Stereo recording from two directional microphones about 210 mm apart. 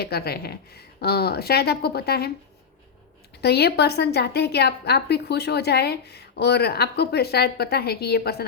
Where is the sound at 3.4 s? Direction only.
50° left (ahead or behind).